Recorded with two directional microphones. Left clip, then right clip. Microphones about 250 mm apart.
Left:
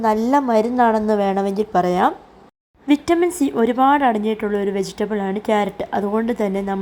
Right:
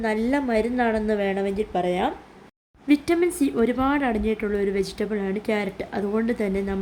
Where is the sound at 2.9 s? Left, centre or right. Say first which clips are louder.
Left 4 dB; centre.